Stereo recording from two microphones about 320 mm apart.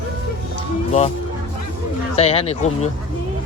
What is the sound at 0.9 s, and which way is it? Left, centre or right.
Speech, left.